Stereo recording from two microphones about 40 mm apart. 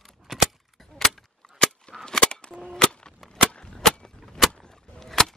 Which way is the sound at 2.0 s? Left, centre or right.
Left.